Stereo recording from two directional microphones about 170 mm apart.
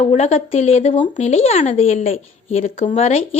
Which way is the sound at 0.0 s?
40° left (ahead or behind).